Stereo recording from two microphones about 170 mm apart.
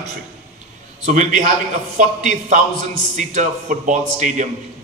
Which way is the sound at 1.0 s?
50° right (ahead or behind).